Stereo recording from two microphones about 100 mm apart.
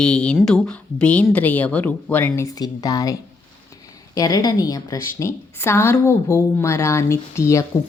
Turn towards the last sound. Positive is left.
turn(degrees=30)  # may be behind; listen again after turning